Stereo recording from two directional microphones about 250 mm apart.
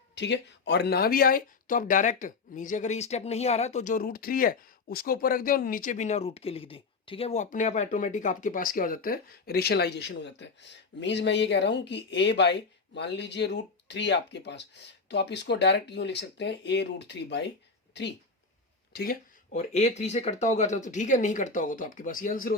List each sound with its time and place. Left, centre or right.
0.2 s speech: left
19.5 s speech: left